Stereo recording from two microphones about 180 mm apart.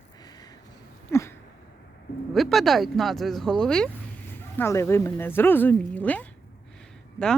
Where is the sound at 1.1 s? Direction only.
15° left (ahead or behind).